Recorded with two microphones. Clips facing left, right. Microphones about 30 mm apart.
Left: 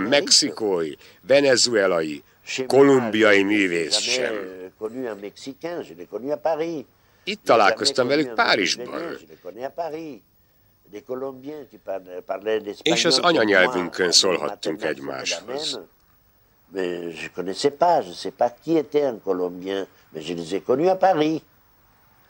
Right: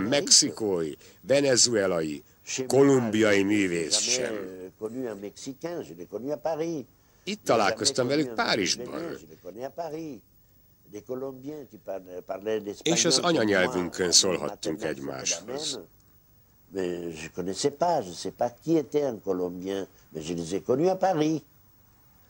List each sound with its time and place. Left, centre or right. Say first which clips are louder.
0.0 s speech: left 5 dB; left